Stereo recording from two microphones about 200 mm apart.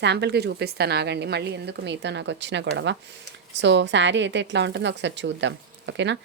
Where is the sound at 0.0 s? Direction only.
60° right (ahead or behind).